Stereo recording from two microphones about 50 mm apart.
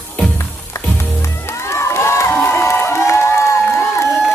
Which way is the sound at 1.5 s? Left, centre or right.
Left.